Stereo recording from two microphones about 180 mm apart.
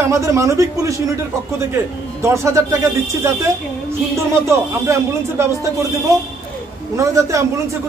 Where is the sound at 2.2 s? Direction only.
15° right (ahead or behind).